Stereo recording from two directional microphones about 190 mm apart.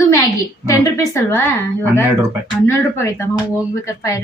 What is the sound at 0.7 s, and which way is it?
A woman's voice, 15° left (ahead or behind).